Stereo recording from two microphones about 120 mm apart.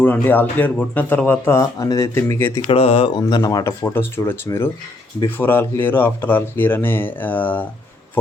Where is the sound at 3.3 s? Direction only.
30° left (ahead or behind).